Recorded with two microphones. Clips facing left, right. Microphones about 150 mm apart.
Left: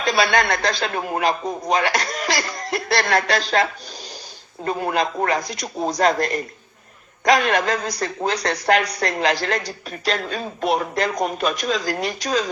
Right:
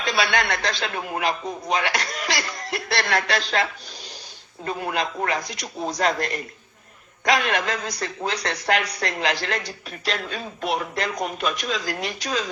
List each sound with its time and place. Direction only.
0.0 s a man's voice: 40° left (ahead or behind)